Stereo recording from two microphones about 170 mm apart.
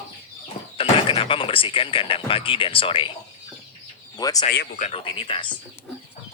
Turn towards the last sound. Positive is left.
turn(degrees=30)  # may be behind; listen again after turning